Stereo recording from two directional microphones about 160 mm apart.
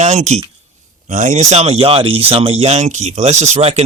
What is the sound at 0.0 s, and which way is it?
Speech, 45° right (ahead or behind).